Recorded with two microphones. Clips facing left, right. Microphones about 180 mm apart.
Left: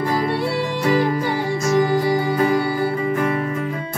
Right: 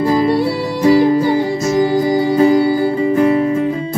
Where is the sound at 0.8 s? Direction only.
30° right (ahead or behind).